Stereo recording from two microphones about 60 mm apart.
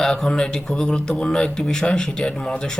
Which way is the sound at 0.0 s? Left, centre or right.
Centre.